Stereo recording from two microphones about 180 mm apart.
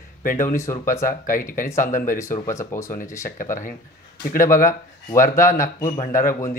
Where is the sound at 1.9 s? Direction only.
50° left (ahead or behind).